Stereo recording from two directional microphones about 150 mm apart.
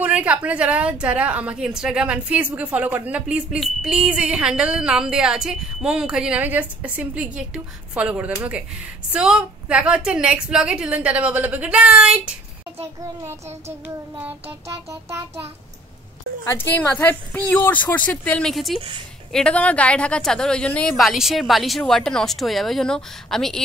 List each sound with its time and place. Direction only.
0.0 s a woman's voice: 10° right (ahead or behind)
13.8 s a woman's voice: 15° right (ahead or behind)
16.4 s a woman's voice: 10° left (ahead or behind)
18.8 s a woman's voice: 35° right (ahead or behind)
19.3 s speech: 5° left (ahead or behind)